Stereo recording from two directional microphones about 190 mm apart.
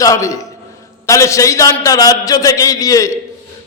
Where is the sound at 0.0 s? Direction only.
15° left (ahead or behind).